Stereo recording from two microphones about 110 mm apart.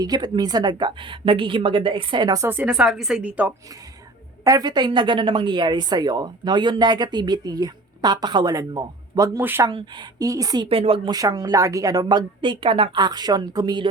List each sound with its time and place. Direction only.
0.0 s a woman's voice: 35° right (ahead or behind)
2.5 s a woman's voice: 15° right (ahead or behind)
2.8 s a woman's voice: 5° right (ahead or behind)
4.4 s speech: 35° right (ahead or behind)
9.4 s speech: 20° right (ahead or behind)
9.7 s speech: 45° right (ahead or behind)
10.7 s speech: 60° right (ahead or behind)
11.1 s speech: 35° right (ahead or behind)